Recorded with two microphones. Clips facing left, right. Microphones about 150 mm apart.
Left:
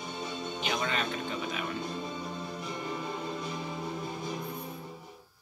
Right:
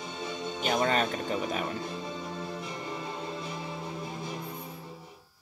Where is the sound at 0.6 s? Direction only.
45° right (ahead or behind).